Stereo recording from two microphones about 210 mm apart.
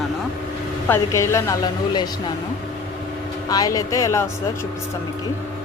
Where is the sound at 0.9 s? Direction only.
15° left (ahead or behind).